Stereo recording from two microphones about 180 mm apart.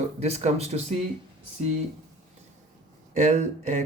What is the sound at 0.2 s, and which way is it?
Speech, 35° right (ahead or behind).